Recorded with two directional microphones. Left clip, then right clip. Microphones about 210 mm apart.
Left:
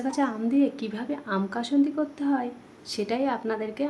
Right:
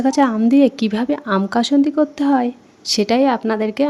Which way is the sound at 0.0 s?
50° right (ahead or behind).